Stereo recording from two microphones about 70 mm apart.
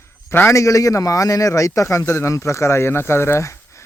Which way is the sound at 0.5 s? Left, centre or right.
Left.